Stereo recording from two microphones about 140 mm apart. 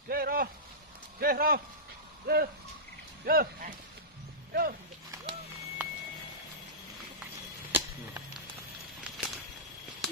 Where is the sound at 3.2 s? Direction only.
90° right.